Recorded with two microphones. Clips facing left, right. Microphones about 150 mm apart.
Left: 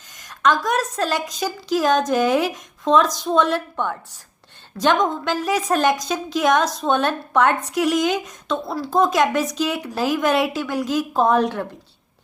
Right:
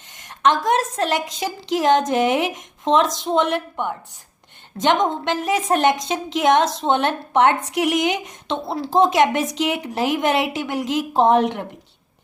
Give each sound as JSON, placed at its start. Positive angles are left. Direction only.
{"t": 0.1, "sound": "a woman's voice", "side_deg": -25}